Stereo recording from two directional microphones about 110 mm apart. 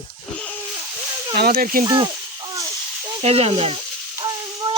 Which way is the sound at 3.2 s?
75° right (ahead or behind).